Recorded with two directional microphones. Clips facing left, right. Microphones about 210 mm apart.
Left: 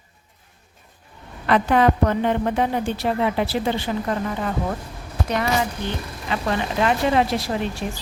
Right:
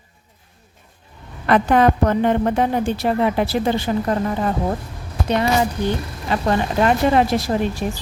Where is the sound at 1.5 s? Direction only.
50° right (ahead or behind).